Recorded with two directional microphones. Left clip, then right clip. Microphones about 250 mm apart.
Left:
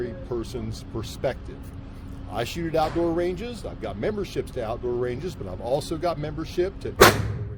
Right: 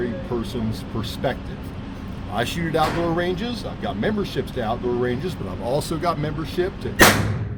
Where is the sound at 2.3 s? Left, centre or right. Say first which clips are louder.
Right 3 dB; left.